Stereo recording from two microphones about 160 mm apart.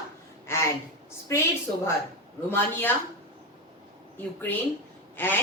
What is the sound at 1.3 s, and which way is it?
Speech, 15° left (ahead or behind).